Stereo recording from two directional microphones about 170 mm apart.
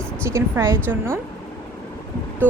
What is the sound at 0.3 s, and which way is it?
Speech, 15° right (ahead or behind).